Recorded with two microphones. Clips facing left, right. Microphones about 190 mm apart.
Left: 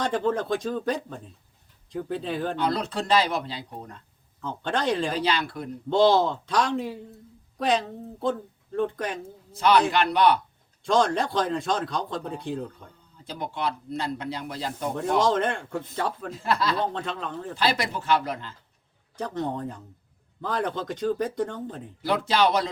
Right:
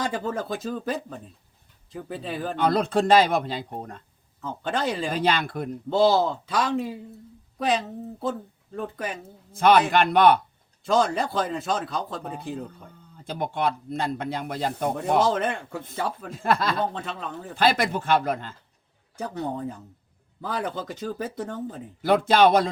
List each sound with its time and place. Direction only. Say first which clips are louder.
0.0 s speech: left 3 dB; 5° right (ahead or behind)
2.6 s speech: right 5 dB; 50° right (ahead or behind)
4.4 s speech: even; 5° right (ahead or behind)
5.1 s speech: right 2 dB; 50° right (ahead or behind)
5.9 s speech: even; 5° right (ahead or behind)
9.5 s speech: right 2 dB; 50° right (ahead or behind)
10.8 s speech: even; 5° right (ahead or behind)
13.2 s speech: right 4 dB; 55° right (ahead or behind)
14.9 s speech: left 1 dB; 5° right (ahead or behind)
16.4 s speech: right 2 dB; 50° right (ahead or behind)
16.9 s speech: left 2 dB; 5° right (ahead or behind)
17.6 s speech: right 4 dB; 50° right (ahead or behind)
19.1 s speech: left 1 dB; 5° right (ahead or behind)
22.0 s speech: right 5 dB; 50° right (ahead or behind)